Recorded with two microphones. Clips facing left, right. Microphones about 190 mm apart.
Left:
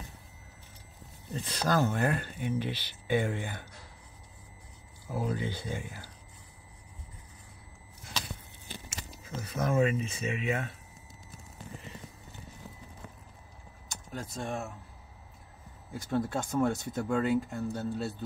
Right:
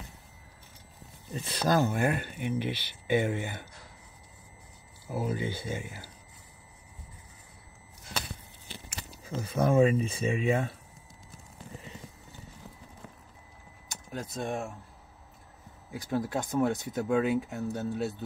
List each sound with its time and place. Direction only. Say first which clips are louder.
1.3 s speech: right 2 dB; 10° right (ahead or behind)
5.0 s speech: right 1 dB; 5° right (ahead or behind)
9.4 s speech: right 4 dB; 30° right (ahead or behind)
14.1 s speech: right 2 dB; 20° right (ahead or behind)
15.9 s speech: even; 10° right (ahead or behind)